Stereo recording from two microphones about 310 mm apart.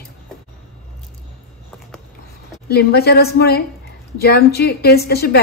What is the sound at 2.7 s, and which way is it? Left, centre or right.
A woman's voice, left.